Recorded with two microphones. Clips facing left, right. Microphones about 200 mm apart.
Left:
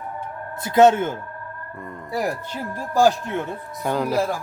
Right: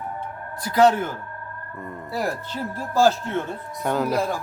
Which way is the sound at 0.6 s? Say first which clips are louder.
Left 3 dB; 25° left (ahead or behind).